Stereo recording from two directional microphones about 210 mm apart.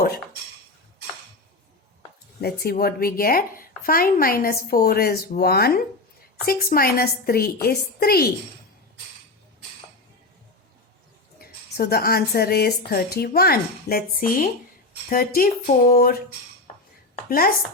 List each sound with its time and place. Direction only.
2.6 s speech: 45° left (ahead or behind)
11.3 s speech: 45° left (ahead or behind)
17.2 s speech: 45° left (ahead or behind)